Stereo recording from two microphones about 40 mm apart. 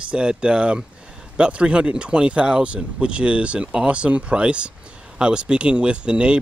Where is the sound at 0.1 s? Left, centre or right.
Right.